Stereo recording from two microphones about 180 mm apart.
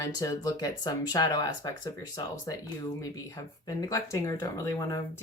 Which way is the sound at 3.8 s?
20° left (ahead or behind).